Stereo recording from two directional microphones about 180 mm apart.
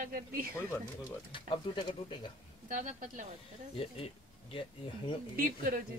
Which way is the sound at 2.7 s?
45° right (ahead or behind).